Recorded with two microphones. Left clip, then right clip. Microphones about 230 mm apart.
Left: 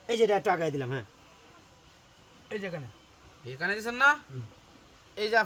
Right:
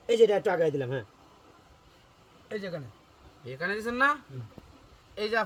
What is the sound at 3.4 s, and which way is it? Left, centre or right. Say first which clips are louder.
Speech: even; left.